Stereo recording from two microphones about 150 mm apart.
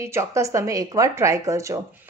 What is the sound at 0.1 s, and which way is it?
Speech, 20° right (ahead or behind).